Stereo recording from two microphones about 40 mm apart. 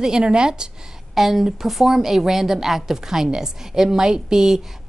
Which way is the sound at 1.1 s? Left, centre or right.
Centre.